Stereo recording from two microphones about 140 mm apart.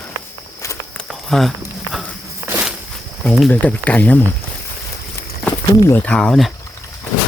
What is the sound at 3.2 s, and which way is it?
Speech, 10° left (ahead or behind).